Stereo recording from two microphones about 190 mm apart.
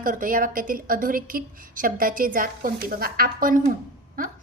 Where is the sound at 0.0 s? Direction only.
45° right (ahead or behind).